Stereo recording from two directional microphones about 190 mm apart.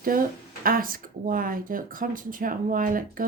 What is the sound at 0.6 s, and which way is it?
Speech, 50° right (ahead or behind).